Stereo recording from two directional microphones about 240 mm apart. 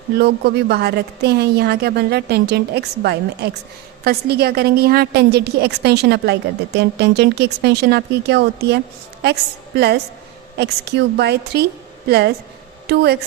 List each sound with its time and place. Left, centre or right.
0.2 s a woman's voice: right